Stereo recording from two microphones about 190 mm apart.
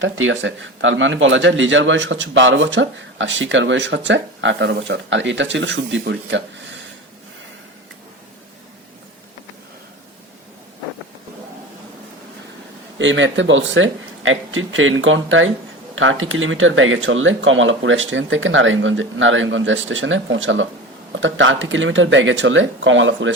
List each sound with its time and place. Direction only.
0.0 s speech: 85° right
13.0 s speech: 75° right (ahead or behind)